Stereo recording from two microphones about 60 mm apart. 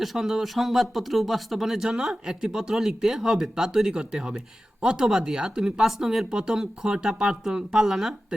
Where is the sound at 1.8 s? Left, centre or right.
Centre.